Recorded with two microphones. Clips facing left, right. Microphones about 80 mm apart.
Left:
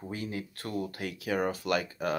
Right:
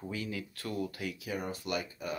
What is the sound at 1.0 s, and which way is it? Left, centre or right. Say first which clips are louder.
Speech: left 6 dB; left.